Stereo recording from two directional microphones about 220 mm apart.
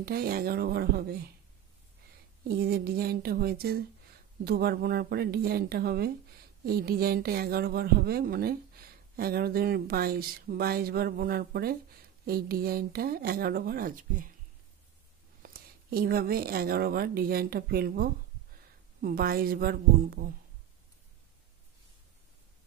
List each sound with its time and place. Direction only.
0.0 s speech: 45° right (ahead or behind)
2.4 s speech: 45° right (ahead or behind)
15.4 s speech: 40° right (ahead or behind)